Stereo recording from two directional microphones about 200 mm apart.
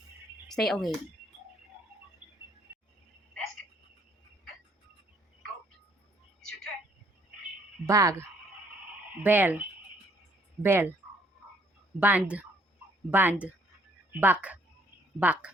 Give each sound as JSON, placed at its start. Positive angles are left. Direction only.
{"t": 0.5, "sound": "speech", "side_deg": 0}
{"t": 7.9, "sound": "speech", "side_deg": -15}
{"t": 10.6, "sound": "speech", "side_deg": -10}
{"t": 11.9, "sound": "speech", "side_deg": -5}